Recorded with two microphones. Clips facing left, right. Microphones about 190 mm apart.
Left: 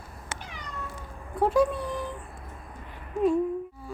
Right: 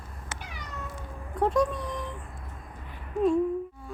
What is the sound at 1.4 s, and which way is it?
Speech, 5° left (ahead or behind).